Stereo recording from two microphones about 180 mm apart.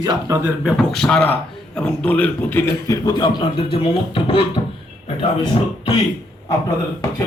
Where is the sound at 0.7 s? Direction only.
Centre (ahead or behind).